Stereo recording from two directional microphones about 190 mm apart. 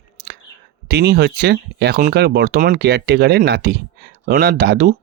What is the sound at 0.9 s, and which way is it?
Speech, 60° right (ahead or behind).